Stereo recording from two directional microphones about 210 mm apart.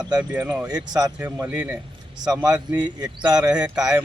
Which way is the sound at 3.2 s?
20° right (ahead or behind).